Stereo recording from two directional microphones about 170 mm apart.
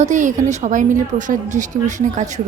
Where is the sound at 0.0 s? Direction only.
45° right (ahead or behind).